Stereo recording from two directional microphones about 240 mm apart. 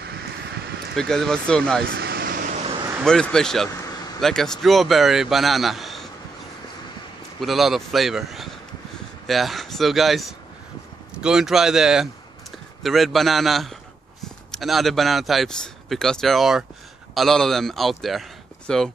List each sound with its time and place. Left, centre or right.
0.0 s a sound: right
0.9 s a man's voice: centre
1.9 s vehicle: right
3.0 s a man's voice: centre
7.3 s a man's voice: centre